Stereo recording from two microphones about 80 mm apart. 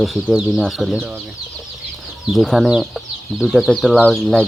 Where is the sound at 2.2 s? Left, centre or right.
Centre.